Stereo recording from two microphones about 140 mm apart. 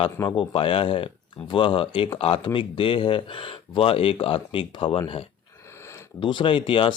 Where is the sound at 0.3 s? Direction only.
40° left (ahead or behind).